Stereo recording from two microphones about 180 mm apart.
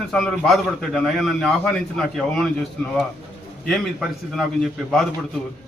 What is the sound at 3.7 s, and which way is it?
A man's voice, centre (ahead or behind).